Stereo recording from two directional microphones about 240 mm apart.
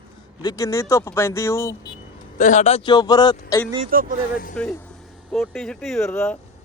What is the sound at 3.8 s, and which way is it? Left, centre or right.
Speech, right.